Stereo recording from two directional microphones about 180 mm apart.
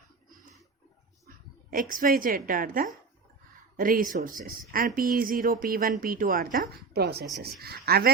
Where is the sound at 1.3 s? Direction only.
50° right (ahead or behind).